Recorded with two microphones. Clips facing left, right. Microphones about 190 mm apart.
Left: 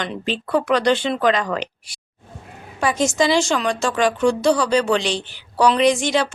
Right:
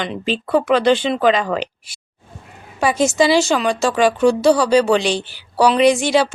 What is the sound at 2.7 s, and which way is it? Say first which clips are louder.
A woman's voice: right 3 dB; 10° right (ahead or behind).